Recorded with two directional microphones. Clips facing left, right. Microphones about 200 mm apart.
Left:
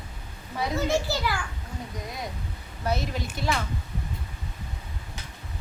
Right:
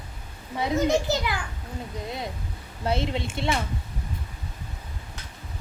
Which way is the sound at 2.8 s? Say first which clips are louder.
Right 2 dB; 25° right (ahead or behind).